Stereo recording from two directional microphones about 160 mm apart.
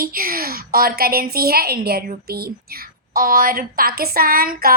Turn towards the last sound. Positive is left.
turn(degrees=-65)  # may be behind; listen again after turning